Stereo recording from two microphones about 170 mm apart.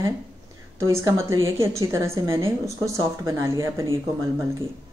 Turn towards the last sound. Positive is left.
turn(degrees=-15)  # may be behind; listen again after turning